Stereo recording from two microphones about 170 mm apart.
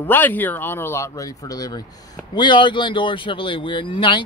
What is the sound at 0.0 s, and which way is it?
Speech, 10° left (ahead or behind).